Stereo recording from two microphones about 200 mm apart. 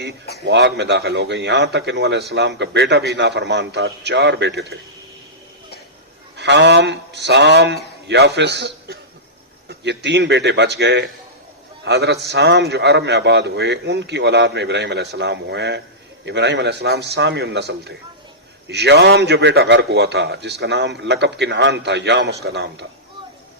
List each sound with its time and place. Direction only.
0.4 s a man's voice: 60° right (ahead or behind)
6.3 s a man's voice: 60° right (ahead or behind)